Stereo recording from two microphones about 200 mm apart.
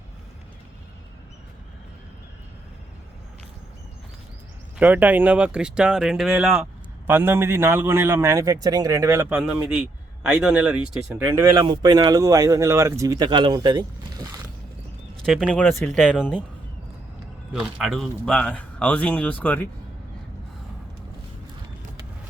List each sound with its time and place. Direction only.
4.8 s speech: 10° right (ahead or behind)
15.3 s speech: centre (ahead or behind)
17.5 s a man's voice: 5° right (ahead or behind)